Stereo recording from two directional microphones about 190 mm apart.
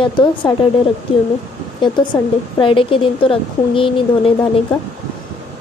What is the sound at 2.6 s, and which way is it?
A woman's voice, 25° left (ahead or behind).